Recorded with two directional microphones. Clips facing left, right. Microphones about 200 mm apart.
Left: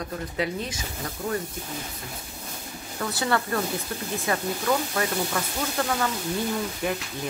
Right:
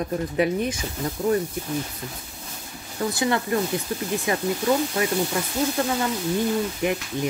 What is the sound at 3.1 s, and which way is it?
Speech, 15° right (ahead or behind).